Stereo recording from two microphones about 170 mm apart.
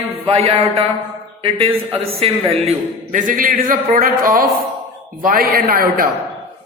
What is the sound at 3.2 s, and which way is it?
Speech, 55° right (ahead or behind).